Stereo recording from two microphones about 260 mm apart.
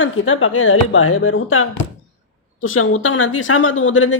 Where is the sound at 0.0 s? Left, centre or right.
Left.